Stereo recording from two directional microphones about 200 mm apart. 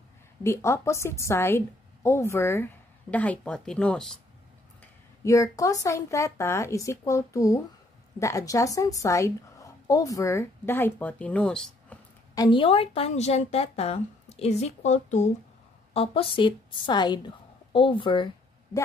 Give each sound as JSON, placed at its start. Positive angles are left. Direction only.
{"t": 0.4, "sound": "a woman's voice", "side_deg": 15}
{"t": 5.2, "sound": "a woman's voice", "side_deg": 15}
{"t": 12.4, "sound": "a woman's voice", "side_deg": 25}